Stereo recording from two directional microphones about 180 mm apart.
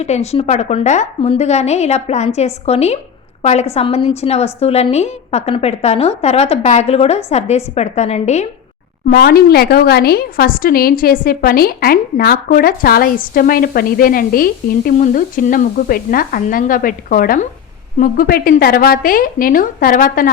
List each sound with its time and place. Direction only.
0.0 s a woman's voice: 35° left (ahead or behind)
9.0 s a woman's voice: 55° left (ahead or behind)